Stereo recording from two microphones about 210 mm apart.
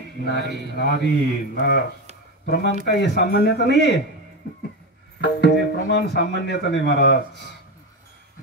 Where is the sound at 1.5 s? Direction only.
55° left (ahead or behind).